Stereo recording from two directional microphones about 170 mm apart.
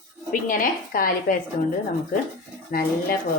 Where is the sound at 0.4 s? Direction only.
55° left (ahead or behind).